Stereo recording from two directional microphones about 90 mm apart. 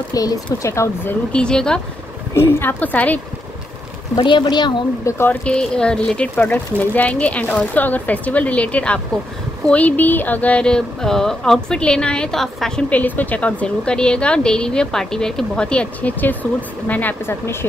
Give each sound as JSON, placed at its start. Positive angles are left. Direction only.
{"t": 0.1, "sound": "speech", "side_deg": 45}
{"t": 1.3, "sound": "speech", "side_deg": 10}
{"t": 2.3, "sound": "a woman's voice", "side_deg": 25}
{"t": 4.2, "sound": "speech", "side_deg": 65}
{"t": 5.0, "sound": "a woman's voice", "side_deg": 25}
{"t": 5.4, "sound": "speech", "side_deg": 10}
{"t": 6.3, "sound": "speech", "side_deg": 20}
{"t": 12.9, "sound": "a woman's voice", "side_deg": 20}